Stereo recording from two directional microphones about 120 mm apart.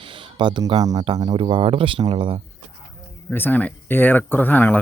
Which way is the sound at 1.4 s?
45° right (ahead or behind).